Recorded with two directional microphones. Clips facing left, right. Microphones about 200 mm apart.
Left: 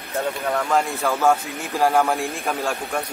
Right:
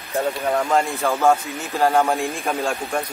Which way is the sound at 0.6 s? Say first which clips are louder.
Right 1 dB; 5° right (ahead or behind).